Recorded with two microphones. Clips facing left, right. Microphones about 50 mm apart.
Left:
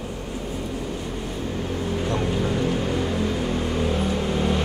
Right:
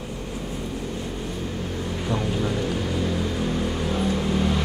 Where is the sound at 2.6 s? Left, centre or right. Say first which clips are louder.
Left 2 dB; left.